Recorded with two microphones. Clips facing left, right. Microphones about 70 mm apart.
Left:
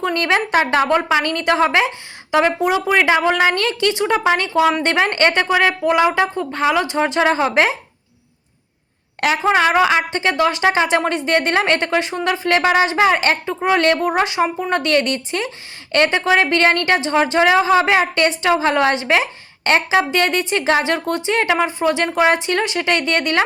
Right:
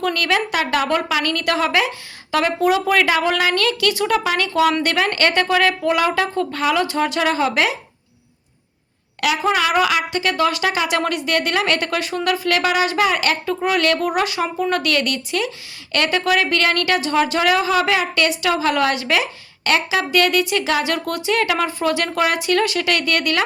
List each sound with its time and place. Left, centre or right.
0.0 s speech: left
9.2 s speech: left